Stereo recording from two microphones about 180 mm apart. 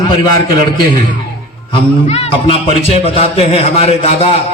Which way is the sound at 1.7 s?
35° left (ahead or behind).